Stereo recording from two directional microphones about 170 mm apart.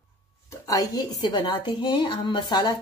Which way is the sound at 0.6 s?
20° left (ahead or behind).